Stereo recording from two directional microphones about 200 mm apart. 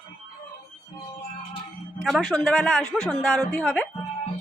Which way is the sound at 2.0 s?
Centre (ahead or behind).